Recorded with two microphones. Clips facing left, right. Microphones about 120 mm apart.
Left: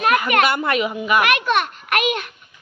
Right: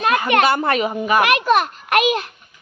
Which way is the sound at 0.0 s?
30° right (ahead or behind).